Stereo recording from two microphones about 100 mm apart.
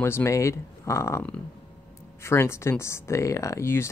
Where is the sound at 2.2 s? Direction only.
25° left (ahead or behind).